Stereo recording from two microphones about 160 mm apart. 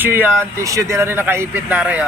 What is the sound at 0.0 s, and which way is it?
Speech, 15° right (ahead or behind).